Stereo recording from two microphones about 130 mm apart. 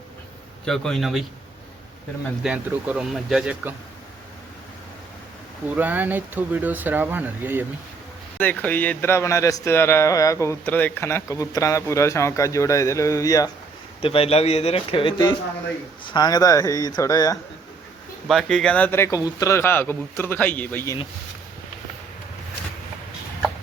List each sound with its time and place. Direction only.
0.6 s a man's voice: 5° left (ahead or behind)
2.4 s speech: 10° right (ahead or behind)
5.7 s speech: 10° right (ahead or behind)
8.4 s a man's voice: 15° left (ahead or behind)
14.0 s a man's voice: 45° left (ahead or behind); by 17.3 s 25° left (ahead or behind)
18.3 s a man's voice: centre (ahead or behind)